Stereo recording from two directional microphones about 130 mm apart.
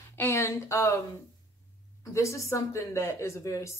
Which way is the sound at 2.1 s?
20° left (ahead or behind).